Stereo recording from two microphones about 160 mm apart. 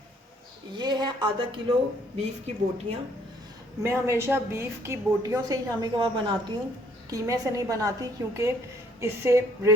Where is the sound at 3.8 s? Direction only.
15° right (ahead or behind).